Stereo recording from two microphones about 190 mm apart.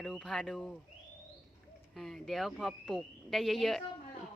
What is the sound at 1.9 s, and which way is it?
Speech, centre (ahead or behind).